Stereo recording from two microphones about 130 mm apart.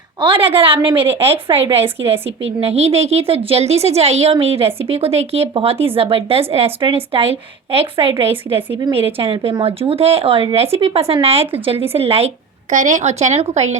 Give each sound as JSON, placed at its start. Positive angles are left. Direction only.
{"t": 0.2, "sound": "a woman's voice", "side_deg": -40}
{"t": 12.7, "sound": "speech", "side_deg": -70}